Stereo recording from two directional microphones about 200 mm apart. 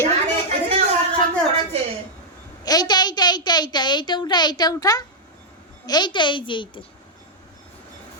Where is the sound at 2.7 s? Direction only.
20° left (ahead or behind).